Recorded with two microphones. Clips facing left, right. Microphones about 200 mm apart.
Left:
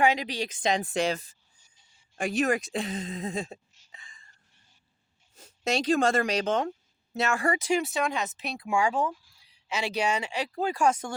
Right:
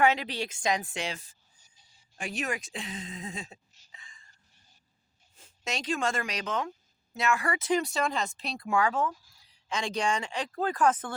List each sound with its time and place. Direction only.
0.0 s speech: 15° left (ahead or behind)
0.8 s speech: 35° left (ahead or behind)
2.3 s speech: 40° left (ahead or behind)
3.9 s a sound: 50° left (ahead or behind)
5.3 s speech: 40° left (ahead or behind)
7.6 s speech: 10° left (ahead or behind)
8.6 s speech: 15° left (ahead or behind)